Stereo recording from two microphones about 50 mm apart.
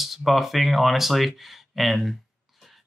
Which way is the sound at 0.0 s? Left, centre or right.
Centre.